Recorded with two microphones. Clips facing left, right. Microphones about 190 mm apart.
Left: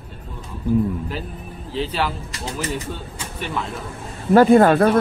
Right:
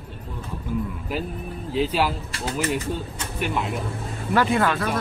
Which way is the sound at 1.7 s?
5° right (ahead or behind).